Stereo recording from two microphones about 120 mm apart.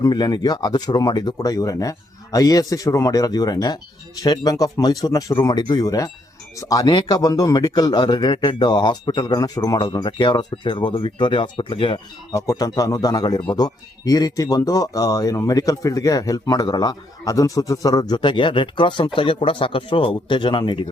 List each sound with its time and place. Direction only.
0.0 s speech: 35° left (ahead or behind)
12.3 s speech: 25° left (ahead or behind)